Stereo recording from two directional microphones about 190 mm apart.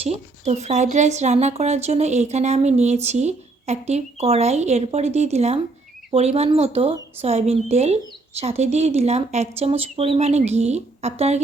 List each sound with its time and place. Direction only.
0.0 s a woman's voice: 35° right (ahead or behind)